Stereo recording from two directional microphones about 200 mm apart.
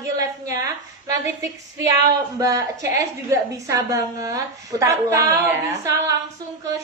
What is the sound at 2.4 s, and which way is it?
A woman's voice, 15° right (ahead or behind).